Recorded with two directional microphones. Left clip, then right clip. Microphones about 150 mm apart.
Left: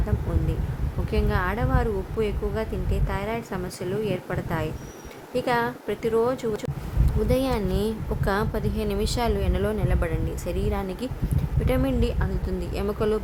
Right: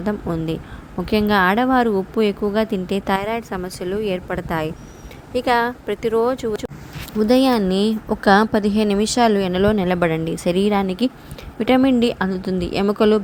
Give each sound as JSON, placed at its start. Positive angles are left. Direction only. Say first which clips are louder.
{"t": 1.1, "sound": "a woman's voice", "louder": "right 10 dB", "side_deg": -55}